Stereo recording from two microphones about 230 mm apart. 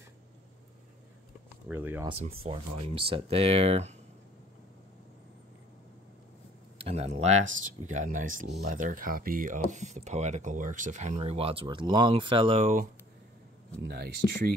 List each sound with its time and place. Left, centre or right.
1.7 s speech: centre
2.0 s speech: right
6.8 s speech: right
8.3 s speech: right
13.8 s speech: right